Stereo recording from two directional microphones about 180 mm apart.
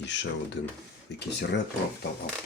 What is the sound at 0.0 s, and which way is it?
Speech, 75° left (ahead or behind).